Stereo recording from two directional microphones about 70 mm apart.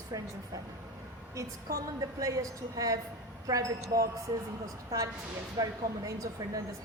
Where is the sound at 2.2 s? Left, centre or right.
Right.